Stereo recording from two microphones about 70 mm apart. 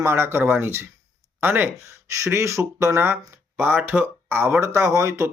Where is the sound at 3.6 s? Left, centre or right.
Right.